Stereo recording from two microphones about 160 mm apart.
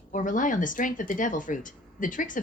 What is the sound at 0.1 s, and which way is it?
Speech, 55° left (ahead or behind).